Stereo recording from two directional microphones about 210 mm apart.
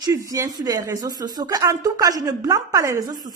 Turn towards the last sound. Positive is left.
turn(degrees=-15)  # may be behind; listen again after turning